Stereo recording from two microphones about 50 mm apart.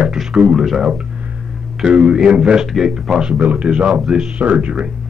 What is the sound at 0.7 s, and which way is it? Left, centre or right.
Speech, centre.